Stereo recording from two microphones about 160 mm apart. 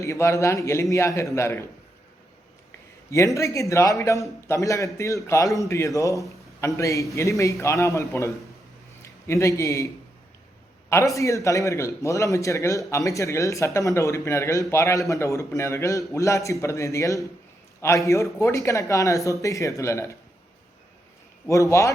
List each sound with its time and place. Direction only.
0.0 s a man's voice: 20° left (ahead or behind)
3.3 s a man's voice: 20° left (ahead or behind)
21.4 s a man's voice: 20° left (ahead or behind)